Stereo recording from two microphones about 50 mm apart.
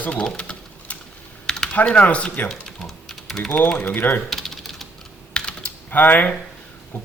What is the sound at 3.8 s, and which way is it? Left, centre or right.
Speech, left.